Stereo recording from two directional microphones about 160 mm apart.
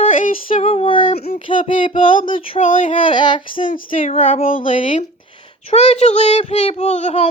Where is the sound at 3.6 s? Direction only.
55° left (ahead or behind).